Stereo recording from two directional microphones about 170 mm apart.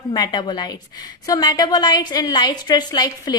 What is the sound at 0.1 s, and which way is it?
A woman's voice, 25° left (ahead or behind).